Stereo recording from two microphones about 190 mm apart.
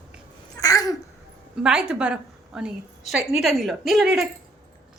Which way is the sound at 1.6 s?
5° right (ahead or behind).